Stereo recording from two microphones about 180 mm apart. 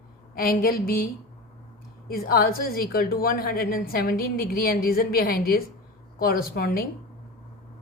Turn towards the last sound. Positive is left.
turn(degrees=55)  # may be behind; listen again after turning